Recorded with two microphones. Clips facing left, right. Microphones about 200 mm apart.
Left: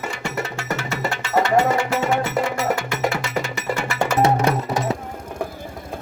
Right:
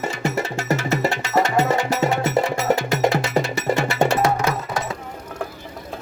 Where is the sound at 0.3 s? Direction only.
40° right (ahead or behind).